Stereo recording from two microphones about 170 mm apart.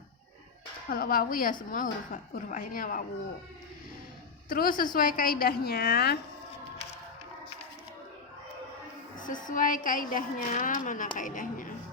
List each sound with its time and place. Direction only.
0.9 s a woman's voice: 60° left (ahead or behind)
4.4 s a woman's voice: 55° left (ahead or behind)
9.2 s a woman's voice: 50° left (ahead or behind)